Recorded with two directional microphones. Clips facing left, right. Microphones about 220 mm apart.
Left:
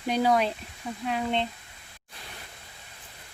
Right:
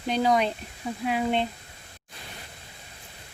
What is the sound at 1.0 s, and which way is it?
Speech, 10° right (ahead or behind).